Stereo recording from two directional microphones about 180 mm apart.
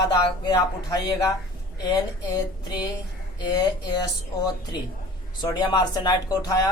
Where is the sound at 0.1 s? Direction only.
25° left (ahead or behind).